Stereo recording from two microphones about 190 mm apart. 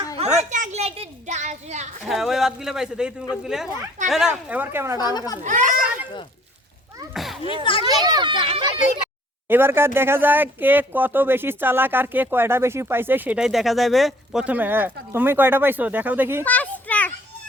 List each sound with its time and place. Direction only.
0.3 s a child's voice: 40° right (ahead or behind)
2.0 s speech: centre (ahead or behind)
5.1 s a child's voice: 20° left (ahead or behind)
5.4 s a child's voice: 45° right (ahead or behind)
7.1 s a sound: centre (ahead or behind)
7.6 s a child's voice: 25° left (ahead or behind)
7.9 s a child's voice: 20° right (ahead or behind)
9.5 s speech: 10° right (ahead or behind)
16.5 s children playing: 10° left (ahead or behind)